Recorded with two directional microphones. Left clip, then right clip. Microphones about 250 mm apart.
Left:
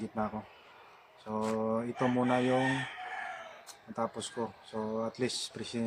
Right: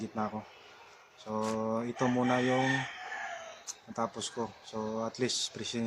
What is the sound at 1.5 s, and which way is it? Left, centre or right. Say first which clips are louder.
Speech: even; centre.